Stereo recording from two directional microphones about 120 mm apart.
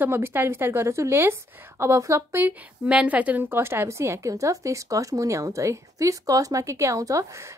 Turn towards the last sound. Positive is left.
turn(degrees=-25)  # may be behind; listen again after turning